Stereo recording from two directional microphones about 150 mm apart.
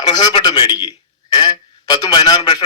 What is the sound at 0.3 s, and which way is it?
A man's voice, 30° left (ahead or behind).